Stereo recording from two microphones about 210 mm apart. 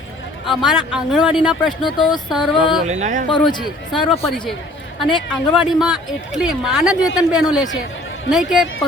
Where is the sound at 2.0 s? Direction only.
20° left (ahead or behind).